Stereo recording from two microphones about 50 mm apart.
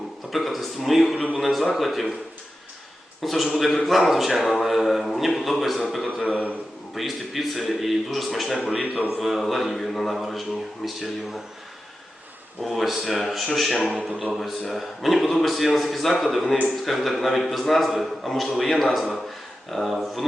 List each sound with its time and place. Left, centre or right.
0.3 s a man's voice: centre
3.2 s a man's voice: centre
6.2 s a man's voice: left
6.9 s a man's voice: centre
8.8 s a man's voice: right
9.0 s a man's voice: centre
12.6 s a man's voice: centre